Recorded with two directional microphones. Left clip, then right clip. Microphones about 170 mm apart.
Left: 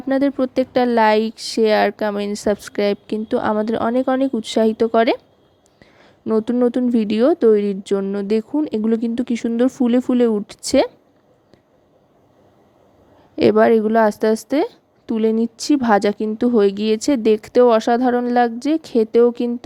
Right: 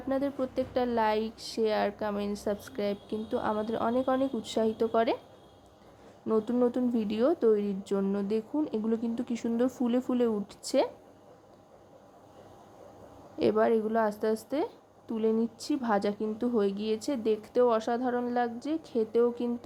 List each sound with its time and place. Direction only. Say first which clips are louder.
0.1 s a woman's voice: left 12 dB; 45° left (ahead or behind)
6.2 s a woman's voice: left 10 dB; 40° left (ahead or behind)
13.3 s a woman's voice: left 12 dB; 45° left (ahead or behind)